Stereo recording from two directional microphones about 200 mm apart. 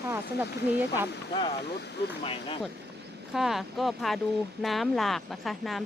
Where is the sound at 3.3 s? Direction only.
Centre (ahead or behind).